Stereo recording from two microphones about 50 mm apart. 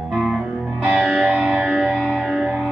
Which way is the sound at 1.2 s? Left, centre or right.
Centre.